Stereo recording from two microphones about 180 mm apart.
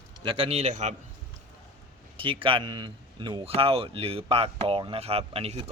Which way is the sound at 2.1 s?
30° right (ahead or behind).